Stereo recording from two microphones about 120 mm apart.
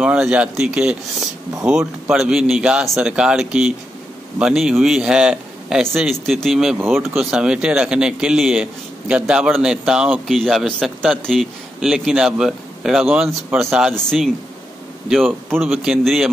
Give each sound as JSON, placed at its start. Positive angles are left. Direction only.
{"t": 0.0, "sound": "a man's voice", "side_deg": -10}
{"t": 15.7, "sound": "a man's voice", "side_deg": -5}